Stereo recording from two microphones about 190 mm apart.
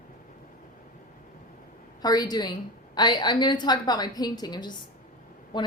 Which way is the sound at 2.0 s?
20° left (ahead or behind).